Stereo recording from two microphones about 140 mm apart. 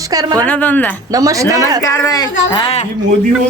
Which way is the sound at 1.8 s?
25° left (ahead or behind).